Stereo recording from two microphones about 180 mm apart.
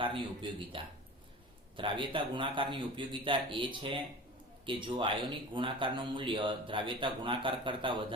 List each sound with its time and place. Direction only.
0.0 s speech: 30° right (ahead or behind)